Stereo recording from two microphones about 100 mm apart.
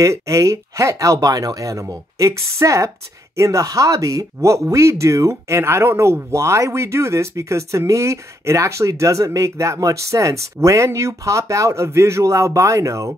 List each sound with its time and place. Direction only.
0.0 s speech: 35° right (ahead or behind)